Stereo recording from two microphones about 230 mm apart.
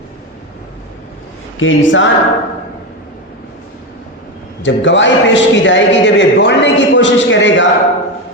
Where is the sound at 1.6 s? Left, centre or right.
Left.